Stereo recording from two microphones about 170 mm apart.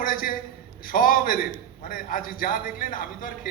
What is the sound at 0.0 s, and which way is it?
A man's voice, 55° left (ahead or behind).